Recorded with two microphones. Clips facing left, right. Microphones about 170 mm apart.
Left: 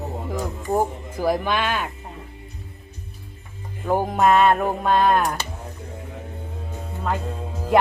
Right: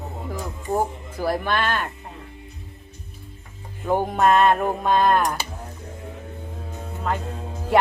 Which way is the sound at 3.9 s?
5° left (ahead or behind).